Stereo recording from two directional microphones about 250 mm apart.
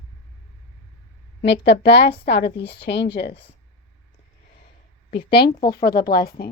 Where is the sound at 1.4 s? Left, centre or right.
Left.